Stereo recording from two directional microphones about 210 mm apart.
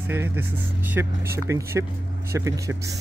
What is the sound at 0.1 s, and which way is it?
Speech, 10° right (ahead or behind).